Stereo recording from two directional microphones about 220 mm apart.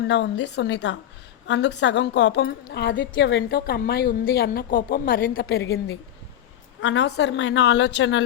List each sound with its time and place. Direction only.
0.1 s a woman's voice: 55° left (ahead or behind)
6.8 s a woman's voice: 50° left (ahead or behind)